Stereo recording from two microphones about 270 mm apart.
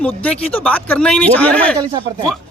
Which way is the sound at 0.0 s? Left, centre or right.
Centre.